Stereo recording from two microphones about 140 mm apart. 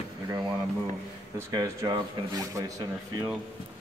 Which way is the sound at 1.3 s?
25° right (ahead or behind).